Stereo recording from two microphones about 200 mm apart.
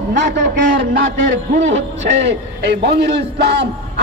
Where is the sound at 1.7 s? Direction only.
60° right (ahead or behind).